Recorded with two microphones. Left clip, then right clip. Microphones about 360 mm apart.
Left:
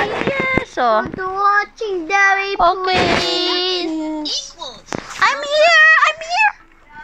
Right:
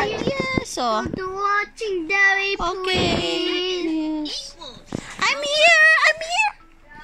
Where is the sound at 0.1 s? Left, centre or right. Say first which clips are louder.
Left 6 dB; left.